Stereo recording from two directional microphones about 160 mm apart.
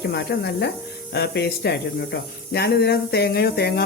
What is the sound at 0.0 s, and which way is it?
Speech, 90° left.